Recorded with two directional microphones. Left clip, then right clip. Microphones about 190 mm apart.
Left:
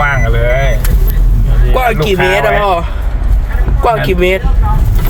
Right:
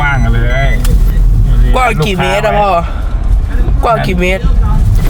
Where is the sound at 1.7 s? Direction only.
15° right (ahead or behind).